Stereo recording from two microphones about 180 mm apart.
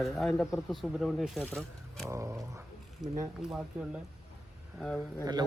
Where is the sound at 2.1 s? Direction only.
15° right (ahead or behind).